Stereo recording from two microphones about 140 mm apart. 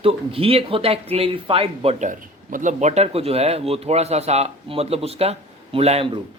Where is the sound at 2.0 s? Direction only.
65° right (ahead or behind).